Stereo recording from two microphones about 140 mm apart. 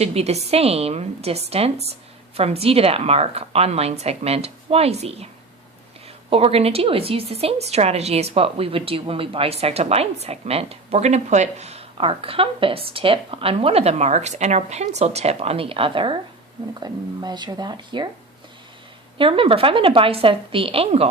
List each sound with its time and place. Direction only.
0.0 s a woman's voice: 50° right (ahead or behind)
6.3 s a woman's voice: 45° right (ahead or behind)
19.2 s a woman's voice: 40° right (ahead or behind)